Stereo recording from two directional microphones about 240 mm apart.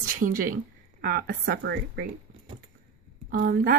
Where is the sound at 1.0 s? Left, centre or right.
Right.